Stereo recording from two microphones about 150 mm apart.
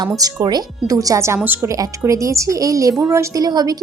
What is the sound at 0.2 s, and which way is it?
A woman's voice, 25° right (ahead or behind).